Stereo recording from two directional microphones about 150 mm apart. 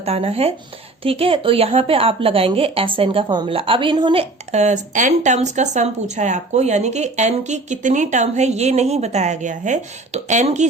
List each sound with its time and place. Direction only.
0.0 s speech: 45° right (ahead or behind)